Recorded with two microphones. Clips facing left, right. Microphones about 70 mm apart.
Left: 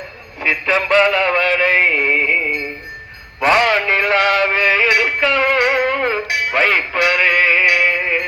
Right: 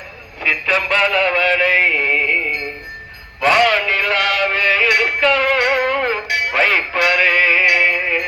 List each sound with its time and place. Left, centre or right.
0.5 s synthetic singing: centre
0.9 s music: centre
3.4 s music: left
4.4 s music: centre
7.1 s synthetic singing: centre
7.8 s music: centre